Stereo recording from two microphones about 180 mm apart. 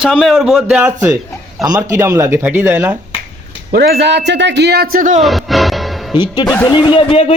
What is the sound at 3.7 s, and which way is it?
Speech, 65° right (ahead or behind).